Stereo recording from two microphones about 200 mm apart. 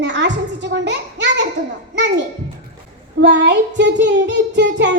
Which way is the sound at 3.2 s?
60° right (ahead or behind).